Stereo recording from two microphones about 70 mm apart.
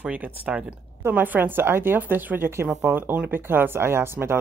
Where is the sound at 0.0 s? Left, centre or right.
Centre.